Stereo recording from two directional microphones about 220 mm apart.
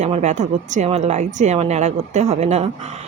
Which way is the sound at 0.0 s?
30° right (ahead or behind).